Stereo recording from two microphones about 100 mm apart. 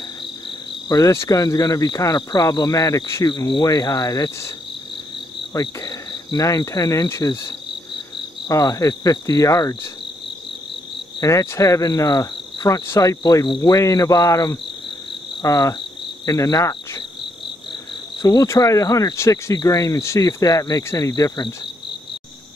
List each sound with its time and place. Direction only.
0.8 s cricket: 40° left (ahead or behind)
1.1 s speech: 30° left (ahead or behind)
3.3 s speech: 45° left (ahead or behind)
5.5 s speech: 40° left (ahead or behind)
11.1 s cricket: 30° left (ahead or behind)
12.8 s speech: 30° left (ahead or behind)
18.2 s speech: 35° left (ahead or behind)
19.5 s speech: 40° left (ahead or behind)